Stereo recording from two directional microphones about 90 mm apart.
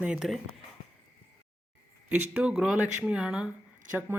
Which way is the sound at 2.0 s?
20° right (ahead or behind).